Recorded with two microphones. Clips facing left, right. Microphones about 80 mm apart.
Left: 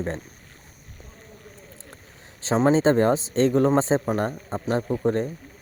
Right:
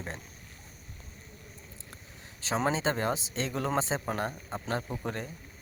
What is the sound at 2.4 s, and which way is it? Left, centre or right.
Speech, left.